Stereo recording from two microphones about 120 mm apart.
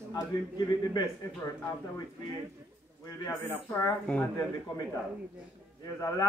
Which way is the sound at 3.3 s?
25° left (ahead or behind).